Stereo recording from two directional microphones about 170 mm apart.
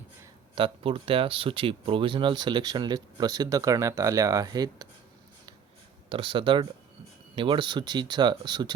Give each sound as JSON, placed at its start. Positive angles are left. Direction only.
{"t": 0.5, "sound": "speech", "side_deg": -30}
{"t": 6.1, "sound": "speech", "side_deg": -30}